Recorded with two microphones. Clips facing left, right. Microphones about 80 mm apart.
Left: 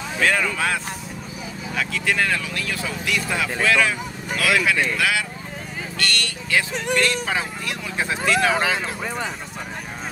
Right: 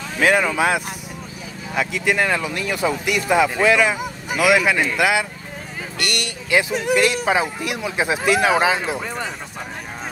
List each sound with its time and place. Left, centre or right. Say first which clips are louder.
0.2 s speech: right 4 dB; centre